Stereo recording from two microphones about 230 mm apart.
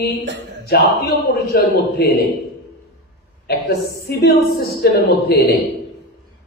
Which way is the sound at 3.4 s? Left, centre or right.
Left.